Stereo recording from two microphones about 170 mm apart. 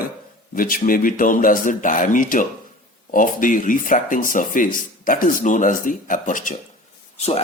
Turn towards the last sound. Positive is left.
turn(degrees=35)  # may be behind; listen again after turning